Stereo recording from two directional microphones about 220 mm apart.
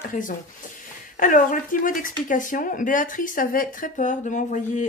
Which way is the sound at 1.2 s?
35° left (ahead or behind).